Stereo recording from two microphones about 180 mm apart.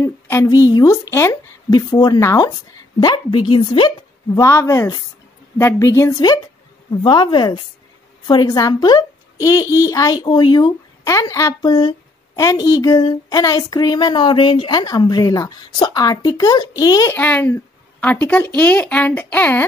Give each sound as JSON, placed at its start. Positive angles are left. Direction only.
{"t": 0.0, "sound": "a woman's voice", "side_deg": 15}
{"t": 4.4, "sound": "a woman's voice", "side_deg": 15}